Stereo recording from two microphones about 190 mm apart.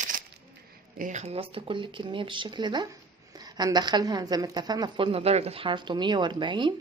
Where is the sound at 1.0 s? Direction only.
40° right (ahead or behind).